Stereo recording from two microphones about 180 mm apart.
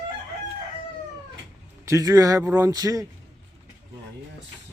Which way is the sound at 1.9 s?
20° right (ahead or behind).